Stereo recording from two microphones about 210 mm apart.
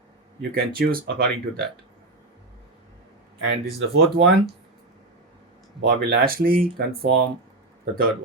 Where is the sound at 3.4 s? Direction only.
55° right (ahead or behind).